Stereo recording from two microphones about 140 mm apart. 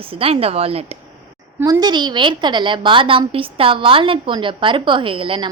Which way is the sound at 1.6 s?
25° right (ahead or behind).